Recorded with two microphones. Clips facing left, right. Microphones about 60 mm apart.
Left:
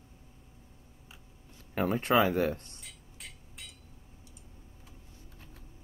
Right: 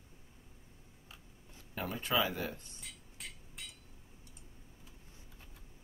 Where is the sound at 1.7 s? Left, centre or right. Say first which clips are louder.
Left 8 dB; left.